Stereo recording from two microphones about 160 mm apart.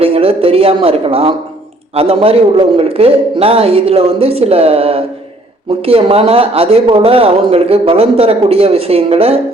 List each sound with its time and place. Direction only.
0.0 s speech: 35° right (ahead or behind)